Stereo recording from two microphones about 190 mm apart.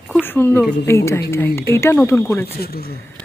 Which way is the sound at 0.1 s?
10° left (ahead or behind).